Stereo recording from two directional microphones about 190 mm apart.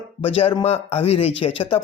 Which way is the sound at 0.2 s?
30° left (ahead or behind).